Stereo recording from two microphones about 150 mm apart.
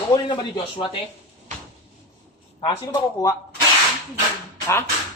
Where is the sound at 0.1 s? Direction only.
35° left (ahead or behind).